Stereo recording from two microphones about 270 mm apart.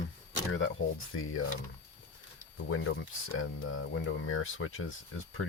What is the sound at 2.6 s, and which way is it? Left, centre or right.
Speech, left.